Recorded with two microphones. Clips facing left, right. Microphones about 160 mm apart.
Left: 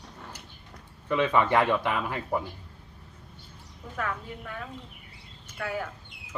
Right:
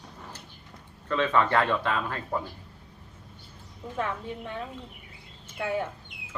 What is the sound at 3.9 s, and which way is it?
A woman's voice, 25° right (ahead or behind).